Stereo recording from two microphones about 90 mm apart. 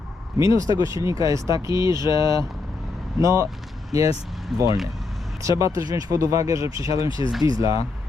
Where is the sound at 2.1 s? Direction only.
50° left (ahead or behind).